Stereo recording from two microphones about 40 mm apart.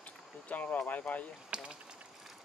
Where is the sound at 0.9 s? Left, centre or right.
Left.